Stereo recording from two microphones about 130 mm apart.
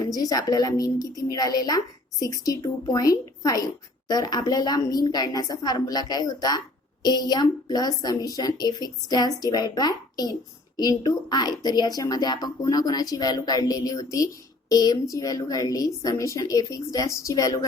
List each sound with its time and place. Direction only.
0.0 s a woman's voice: 25° left (ahead or behind)